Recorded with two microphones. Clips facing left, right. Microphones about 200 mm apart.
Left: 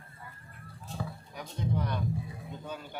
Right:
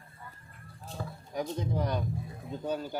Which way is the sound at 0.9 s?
40° right (ahead or behind).